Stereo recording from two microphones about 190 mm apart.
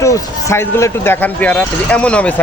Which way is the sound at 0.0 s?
15° left (ahead or behind).